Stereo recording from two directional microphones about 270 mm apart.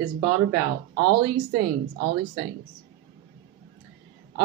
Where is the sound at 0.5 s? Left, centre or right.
Right.